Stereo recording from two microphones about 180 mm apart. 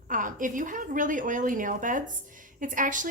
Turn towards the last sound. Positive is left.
turn(degrees=-45)  # may be behind; listen again after turning